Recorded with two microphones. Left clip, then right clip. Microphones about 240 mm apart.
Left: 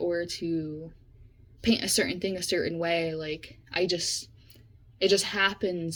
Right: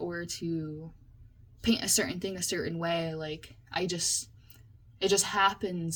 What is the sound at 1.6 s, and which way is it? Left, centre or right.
Speech, right.